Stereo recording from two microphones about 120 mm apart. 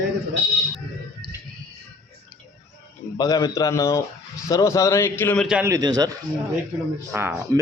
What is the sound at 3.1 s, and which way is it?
A man's voice, 30° left (ahead or behind).